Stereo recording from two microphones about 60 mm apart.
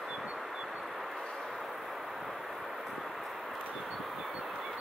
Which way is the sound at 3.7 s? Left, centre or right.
Centre.